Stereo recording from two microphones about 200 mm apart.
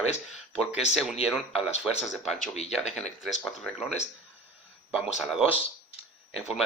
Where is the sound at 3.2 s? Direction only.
5° left (ahead or behind).